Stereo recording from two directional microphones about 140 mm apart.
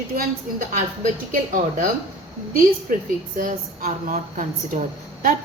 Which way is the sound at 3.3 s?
75° right (ahead or behind).